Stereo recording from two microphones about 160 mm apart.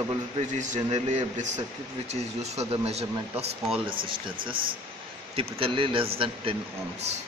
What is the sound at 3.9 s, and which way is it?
Speech, 60° right (ahead or behind).